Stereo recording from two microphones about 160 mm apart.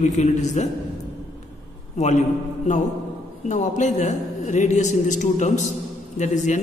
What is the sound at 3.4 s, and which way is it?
A man's voice, 45° left (ahead or behind).